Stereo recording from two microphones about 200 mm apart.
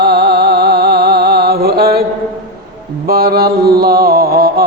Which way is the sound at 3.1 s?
50° right (ahead or behind).